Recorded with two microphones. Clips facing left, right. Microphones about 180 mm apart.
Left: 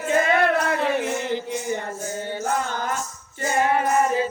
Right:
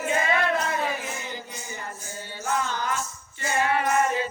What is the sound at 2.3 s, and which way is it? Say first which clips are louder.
Music: left 1 dB; 50° left (ahead or behind).